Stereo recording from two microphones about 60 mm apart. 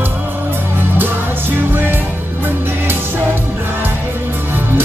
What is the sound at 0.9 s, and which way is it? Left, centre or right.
Music, right.